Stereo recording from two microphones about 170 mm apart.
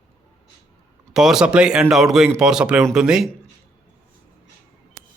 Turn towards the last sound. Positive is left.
turn(degrees=-5)  # may be behind; listen again after turning